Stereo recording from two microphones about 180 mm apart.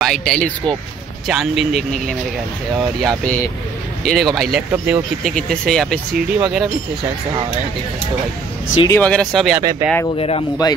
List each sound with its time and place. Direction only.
0.0 s speech: centre (ahead or behind)
3.0 s speech: centre (ahead or behind)
8.8 s speech: 10° left (ahead or behind)
9.6 s speech: 20° right (ahead or behind)
10.1 s speech: 30° left (ahead or behind)